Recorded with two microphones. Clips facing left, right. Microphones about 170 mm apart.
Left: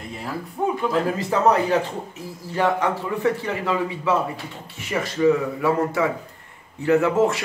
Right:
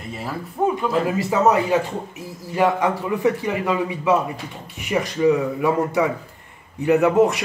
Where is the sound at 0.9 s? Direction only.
10° right (ahead or behind).